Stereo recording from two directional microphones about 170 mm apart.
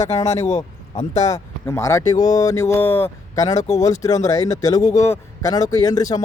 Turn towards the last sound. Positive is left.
turn(degrees=20)  # may be behind; listen again after turning